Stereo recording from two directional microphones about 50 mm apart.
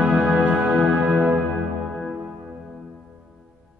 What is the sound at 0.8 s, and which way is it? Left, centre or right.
Music, centre.